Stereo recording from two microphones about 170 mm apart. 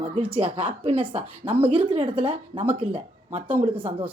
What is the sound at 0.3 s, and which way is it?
Speech, 35° right (ahead or behind).